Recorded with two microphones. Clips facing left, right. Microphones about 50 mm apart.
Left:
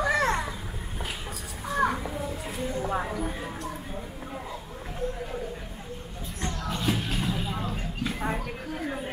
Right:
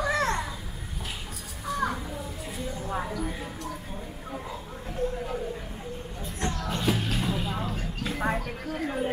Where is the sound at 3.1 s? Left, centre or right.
Left.